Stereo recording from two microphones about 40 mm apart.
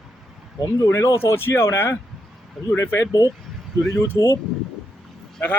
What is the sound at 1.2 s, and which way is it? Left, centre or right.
Speech, left.